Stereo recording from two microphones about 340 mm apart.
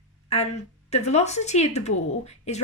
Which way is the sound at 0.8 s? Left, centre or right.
Centre.